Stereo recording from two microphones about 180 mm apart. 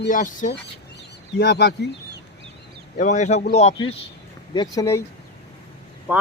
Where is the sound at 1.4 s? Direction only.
65° left (ahead or behind).